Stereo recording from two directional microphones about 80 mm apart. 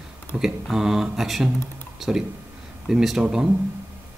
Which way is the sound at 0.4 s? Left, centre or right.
Centre.